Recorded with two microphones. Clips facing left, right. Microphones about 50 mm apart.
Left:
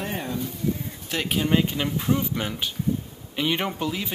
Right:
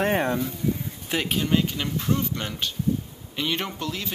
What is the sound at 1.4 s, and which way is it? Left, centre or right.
Speech, centre.